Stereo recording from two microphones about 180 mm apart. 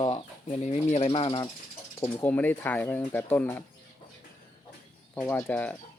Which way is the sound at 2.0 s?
10° left (ahead or behind).